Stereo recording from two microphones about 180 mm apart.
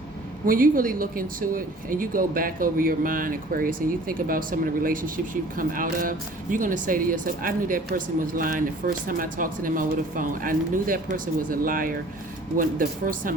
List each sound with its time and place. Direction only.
0.4 s speech: 50° right (ahead or behind)